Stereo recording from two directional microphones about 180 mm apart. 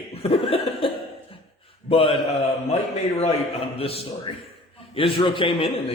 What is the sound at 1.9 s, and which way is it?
A man's voice, 30° left (ahead or behind).